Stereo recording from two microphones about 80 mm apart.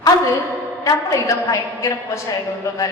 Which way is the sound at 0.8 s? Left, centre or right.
Left.